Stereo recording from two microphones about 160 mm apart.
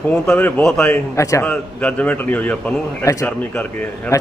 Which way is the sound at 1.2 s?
20° left (ahead or behind).